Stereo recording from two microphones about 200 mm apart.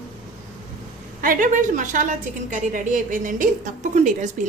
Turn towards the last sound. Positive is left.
turn(degrees=-40)  # may be behind; listen again after turning